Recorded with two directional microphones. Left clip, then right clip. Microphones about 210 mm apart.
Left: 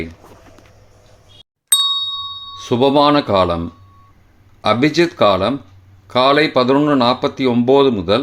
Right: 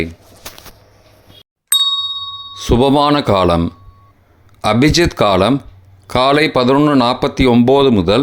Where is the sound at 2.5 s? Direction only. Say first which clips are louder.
Right 2 dB; 25° right (ahead or behind).